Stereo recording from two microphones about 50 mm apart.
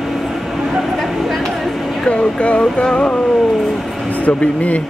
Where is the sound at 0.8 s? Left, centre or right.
Centre.